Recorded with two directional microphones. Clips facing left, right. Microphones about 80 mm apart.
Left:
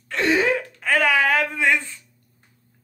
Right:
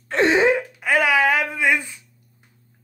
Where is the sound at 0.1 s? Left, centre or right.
Right; by 2.0 s centre.